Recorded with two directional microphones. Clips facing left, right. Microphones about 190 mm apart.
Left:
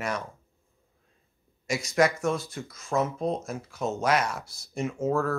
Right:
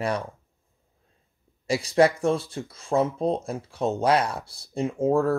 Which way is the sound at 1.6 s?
30° right (ahead or behind).